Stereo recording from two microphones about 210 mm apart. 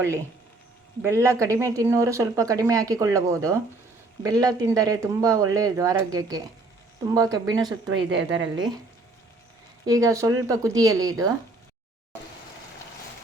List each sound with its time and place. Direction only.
1.0 s a woman's voice: 15° right (ahead or behind)
9.8 s speech: 15° right (ahead or behind)